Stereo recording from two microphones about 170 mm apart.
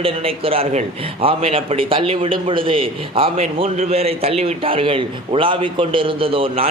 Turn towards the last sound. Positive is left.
turn(degrees=-30)  # may be behind; listen again after turning